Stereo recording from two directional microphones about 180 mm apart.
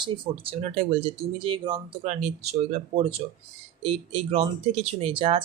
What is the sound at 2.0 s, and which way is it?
Speech, 40° right (ahead or behind).